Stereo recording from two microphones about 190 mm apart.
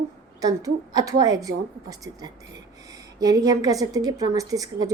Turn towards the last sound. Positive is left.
turn(degrees=-20)  # may be behind; listen again after turning